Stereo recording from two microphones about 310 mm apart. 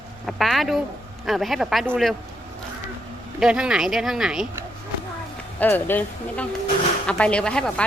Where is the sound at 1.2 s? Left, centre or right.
Centre.